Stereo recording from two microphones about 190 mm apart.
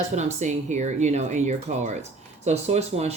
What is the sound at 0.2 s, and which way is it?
Speech, 40° right (ahead or behind).